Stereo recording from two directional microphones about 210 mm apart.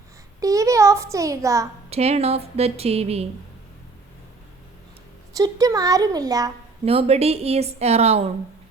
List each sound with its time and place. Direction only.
0.3 s a sound: 15° right (ahead or behind)
1.9 s a woman's voice: 30° right (ahead or behind)
5.4 s speech: 15° right (ahead or behind)
6.8 s a woman's voice: 30° right (ahead or behind)